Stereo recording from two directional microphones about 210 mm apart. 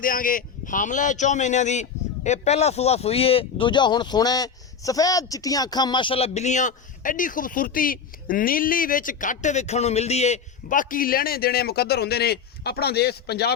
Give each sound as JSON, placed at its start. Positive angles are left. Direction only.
{"t": 0.0, "sound": "a man's voice", "side_deg": 40}